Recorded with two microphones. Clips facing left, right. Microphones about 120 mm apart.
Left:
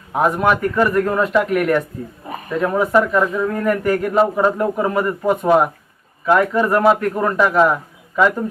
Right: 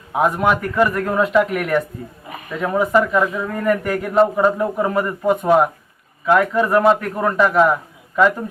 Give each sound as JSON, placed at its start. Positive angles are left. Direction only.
{"t": 0.1, "sound": "speech", "side_deg": 0}